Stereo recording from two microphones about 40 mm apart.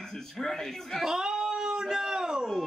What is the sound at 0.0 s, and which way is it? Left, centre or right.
Speech, centre.